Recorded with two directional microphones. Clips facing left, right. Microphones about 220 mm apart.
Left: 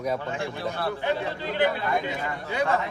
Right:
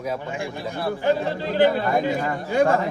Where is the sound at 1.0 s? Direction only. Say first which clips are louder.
Right 6 dB; 45° right (ahead or behind).